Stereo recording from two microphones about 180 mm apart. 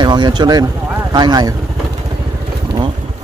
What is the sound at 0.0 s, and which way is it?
Speech, 25° right (ahead or behind).